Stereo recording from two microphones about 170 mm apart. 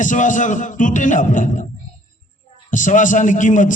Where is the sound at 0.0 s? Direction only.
50° left (ahead or behind).